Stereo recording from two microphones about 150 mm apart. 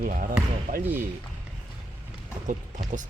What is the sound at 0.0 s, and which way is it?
Speech, 65° right (ahead or behind).